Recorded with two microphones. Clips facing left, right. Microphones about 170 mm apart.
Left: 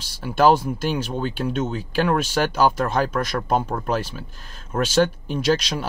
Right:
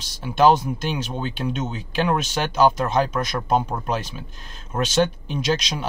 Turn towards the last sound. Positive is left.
turn(degrees=5)  # may be behind; listen again after turning